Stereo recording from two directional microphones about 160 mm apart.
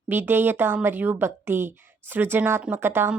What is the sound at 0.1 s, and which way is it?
A woman's voice, 15° right (ahead or behind).